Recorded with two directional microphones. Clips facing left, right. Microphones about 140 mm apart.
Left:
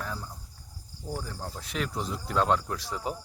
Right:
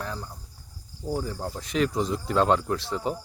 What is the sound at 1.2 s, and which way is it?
Speech, 5° right (ahead or behind).